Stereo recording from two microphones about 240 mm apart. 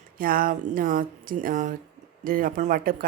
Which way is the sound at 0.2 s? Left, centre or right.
Right.